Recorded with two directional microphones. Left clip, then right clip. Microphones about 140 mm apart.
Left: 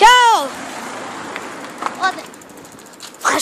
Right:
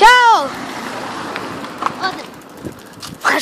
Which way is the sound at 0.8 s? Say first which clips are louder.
Right 3 dB; 30° right (ahead or behind).